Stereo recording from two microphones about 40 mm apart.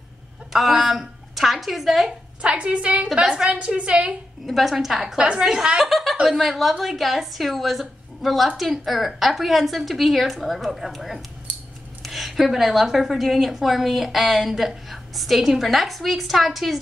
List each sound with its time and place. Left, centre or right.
0.5 s a man's voice: centre
2.4 s a woman's voice: right
4.5 s a woman's voice: centre
5.8 s a woman's voice: centre